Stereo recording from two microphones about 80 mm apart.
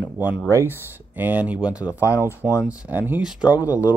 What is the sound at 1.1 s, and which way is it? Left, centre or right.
Speech, right.